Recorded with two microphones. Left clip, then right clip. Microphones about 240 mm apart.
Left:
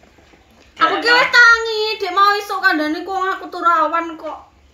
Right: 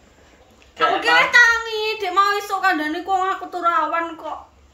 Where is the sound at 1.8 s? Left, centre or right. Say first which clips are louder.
Left 2 dB; right.